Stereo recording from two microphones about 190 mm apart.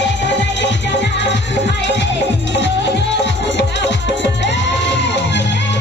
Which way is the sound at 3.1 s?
70° left (ahead or behind).